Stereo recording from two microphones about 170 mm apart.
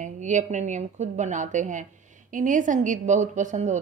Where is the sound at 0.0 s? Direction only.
45° right (ahead or behind).